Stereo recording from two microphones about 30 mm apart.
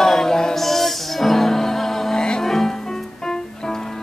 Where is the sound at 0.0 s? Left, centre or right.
Centre.